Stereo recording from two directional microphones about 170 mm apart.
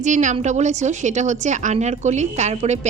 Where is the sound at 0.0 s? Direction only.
45° right (ahead or behind).